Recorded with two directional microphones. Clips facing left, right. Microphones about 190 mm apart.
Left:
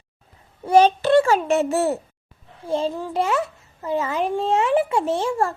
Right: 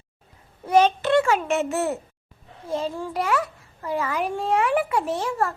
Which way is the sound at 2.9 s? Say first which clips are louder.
Left 2 dB; 20° left (ahead or behind).